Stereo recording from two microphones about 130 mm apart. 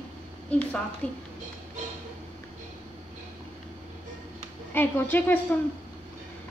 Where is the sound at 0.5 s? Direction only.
10° left (ahead or behind).